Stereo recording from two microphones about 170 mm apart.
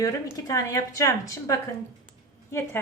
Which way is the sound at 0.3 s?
20° left (ahead or behind).